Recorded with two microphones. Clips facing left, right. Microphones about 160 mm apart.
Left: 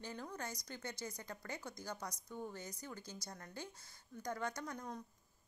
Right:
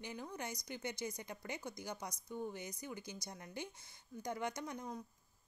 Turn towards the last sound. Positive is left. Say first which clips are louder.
# right 1 dB
turn(degrees=-10)  # may be behind; listen again after turning